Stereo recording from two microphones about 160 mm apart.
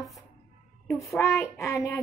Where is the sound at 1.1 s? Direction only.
20° left (ahead or behind).